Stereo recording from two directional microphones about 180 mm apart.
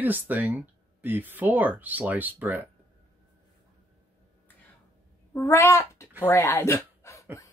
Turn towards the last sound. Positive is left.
turn(degrees=15)  # may be behind; listen again after turning